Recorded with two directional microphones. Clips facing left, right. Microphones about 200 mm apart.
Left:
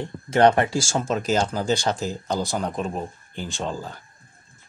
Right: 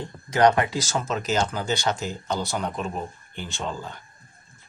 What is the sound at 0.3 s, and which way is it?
Speech, 25° left (ahead or behind).